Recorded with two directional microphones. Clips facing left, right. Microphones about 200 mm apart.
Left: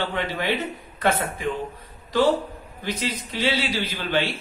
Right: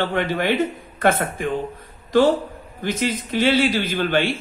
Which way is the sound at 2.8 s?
50° right (ahead or behind).